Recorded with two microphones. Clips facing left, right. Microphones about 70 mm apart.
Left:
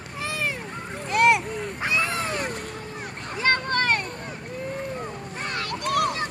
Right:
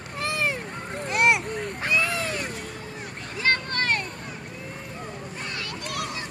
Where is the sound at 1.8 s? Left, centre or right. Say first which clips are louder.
Even; centre.